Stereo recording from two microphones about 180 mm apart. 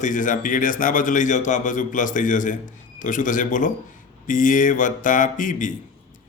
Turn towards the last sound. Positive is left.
turn(degrees=45)  # may be behind; listen again after turning